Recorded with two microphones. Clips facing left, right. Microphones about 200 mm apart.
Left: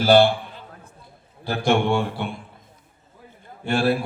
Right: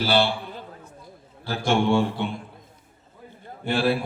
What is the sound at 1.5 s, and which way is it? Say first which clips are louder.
Speech: left 3 dB; 55° left (ahead or behind).